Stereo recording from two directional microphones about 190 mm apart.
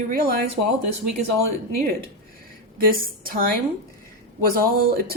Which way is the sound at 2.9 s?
50° right (ahead or behind).